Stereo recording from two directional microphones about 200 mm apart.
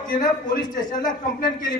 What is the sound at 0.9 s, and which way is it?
Speech, 40° left (ahead or behind).